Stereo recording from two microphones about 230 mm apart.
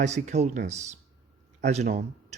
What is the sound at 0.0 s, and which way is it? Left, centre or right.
Speech, right.